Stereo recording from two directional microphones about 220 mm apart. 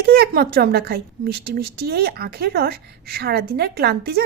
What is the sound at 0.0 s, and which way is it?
A woman's voice, 45° right (ahead or behind).